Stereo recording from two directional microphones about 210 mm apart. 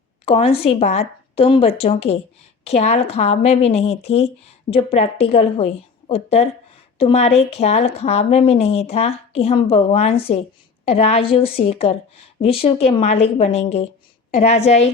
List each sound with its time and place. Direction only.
0.3 s a woman's voice: 25° left (ahead or behind)